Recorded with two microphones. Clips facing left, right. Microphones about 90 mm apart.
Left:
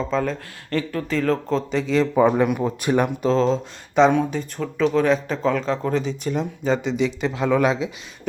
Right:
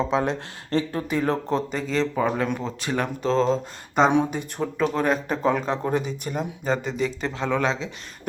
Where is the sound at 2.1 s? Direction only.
10° left (ahead or behind).